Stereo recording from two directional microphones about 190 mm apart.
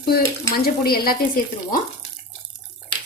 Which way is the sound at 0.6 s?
50° left (ahead or behind).